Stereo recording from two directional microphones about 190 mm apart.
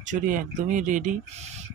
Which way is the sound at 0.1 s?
45° right (ahead or behind).